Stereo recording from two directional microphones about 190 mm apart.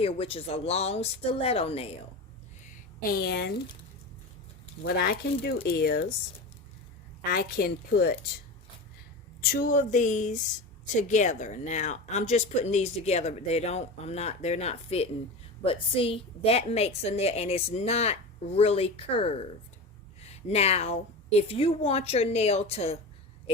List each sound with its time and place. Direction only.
0.0 s speech: 30° left (ahead or behind)
3.0 s a woman's voice: 50° left (ahead or behind)
4.9 s a woman's voice: 55° left (ahead or behind)
7.3 s a woman's voice: 50° left (ahead or behind)
9.5 s speech: 50° left (ahead or behind); by 23.0 s 35° left (ahead or behind)